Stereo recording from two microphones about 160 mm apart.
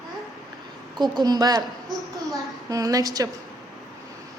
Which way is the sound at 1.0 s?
25° right (ahead or behind).